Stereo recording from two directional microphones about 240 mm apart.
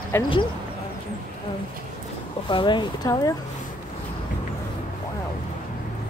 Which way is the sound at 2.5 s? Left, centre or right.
Centre.